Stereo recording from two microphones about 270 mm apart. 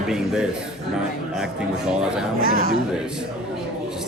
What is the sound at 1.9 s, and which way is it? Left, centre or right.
Speech, centre.